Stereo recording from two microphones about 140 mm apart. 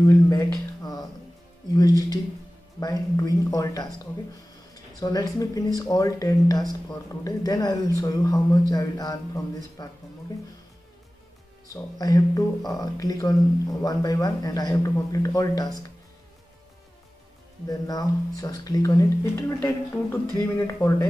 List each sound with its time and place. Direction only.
0.0 s speech: 25° left (ahead or behind)
1.8 s speech: 25° left (ahead or behind)
5.0 s speech: 25° left (ahead or behind)
11.6 s speech: 25° left (ahead or behind)
17.6 s speech: 25° left (ahead or behind)